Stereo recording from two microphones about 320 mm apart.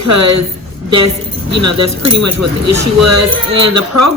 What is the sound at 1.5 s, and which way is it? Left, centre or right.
Speech, right.